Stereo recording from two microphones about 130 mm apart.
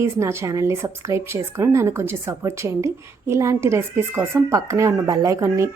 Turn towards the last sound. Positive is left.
turn(degrees=-25)  # may be behind; listen again after turning